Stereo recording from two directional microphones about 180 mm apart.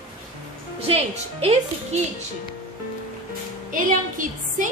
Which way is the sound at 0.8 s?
35° right (ahead or behind).